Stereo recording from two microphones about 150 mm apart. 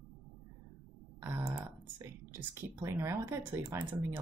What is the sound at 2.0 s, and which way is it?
Speech, 15° right (ahead or behind).